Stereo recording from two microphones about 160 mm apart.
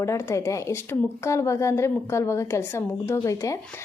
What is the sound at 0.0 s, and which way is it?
A woman's voice, 20° left (ahead or behind).